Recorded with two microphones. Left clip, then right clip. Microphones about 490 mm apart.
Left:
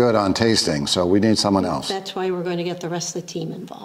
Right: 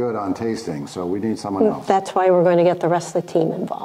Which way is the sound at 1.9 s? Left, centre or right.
Right.